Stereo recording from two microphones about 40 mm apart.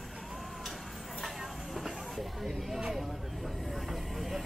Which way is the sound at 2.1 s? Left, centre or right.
Centre.